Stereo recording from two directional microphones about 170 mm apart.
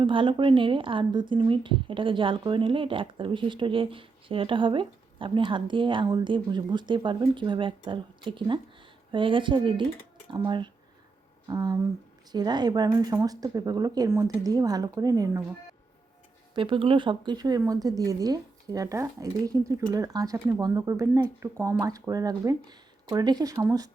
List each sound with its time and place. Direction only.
0.0 s a woman's voice: 30° right (ahead or behind)
16.6 s a woman's voice: 30° right (ahead or behind)